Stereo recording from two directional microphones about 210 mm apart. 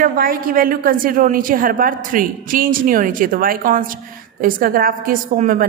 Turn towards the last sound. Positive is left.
turn(degrees=-40)  # may be behind; listen again after turning